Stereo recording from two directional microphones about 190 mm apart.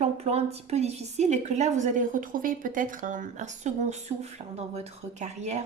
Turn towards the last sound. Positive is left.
turn(degrees=-35)  # may be behind; listen again after turning